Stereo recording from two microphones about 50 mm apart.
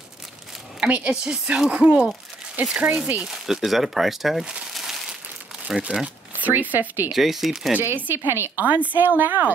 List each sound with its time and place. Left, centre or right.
0.8 s speech: right
1.1 s speech: centre
3.3 s speech: centre
4.7 s a sound: centre
5.7 s speech: centre
6.4 s a woman's voice: right
7.1 s speech: centre
7.8 s speech: right
8.6 s a woman's voice: right